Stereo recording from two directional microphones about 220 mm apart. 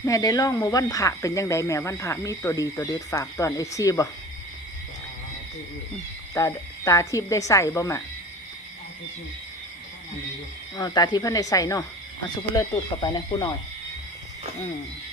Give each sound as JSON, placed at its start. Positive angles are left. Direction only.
{"t": 0.0, "sound": "speech", "side_deg": 15}
{"t": 6.3, "sound": "speech", "side_deg": 15}
{"t": 10.8, "sound": "speech", "side_deg": 15}